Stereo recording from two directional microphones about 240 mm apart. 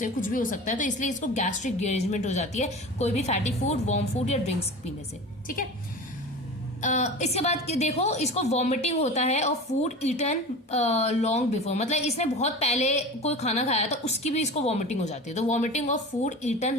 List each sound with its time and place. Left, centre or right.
0.0 s a woman's voice: left
6.8 s a woman's voice: left